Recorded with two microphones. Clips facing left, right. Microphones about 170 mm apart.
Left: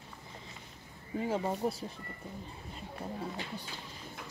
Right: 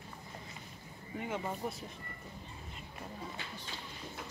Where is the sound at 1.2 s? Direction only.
30° left (ahead or behind).